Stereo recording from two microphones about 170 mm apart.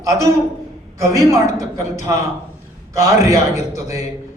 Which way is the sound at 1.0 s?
20° right (ahead or behind).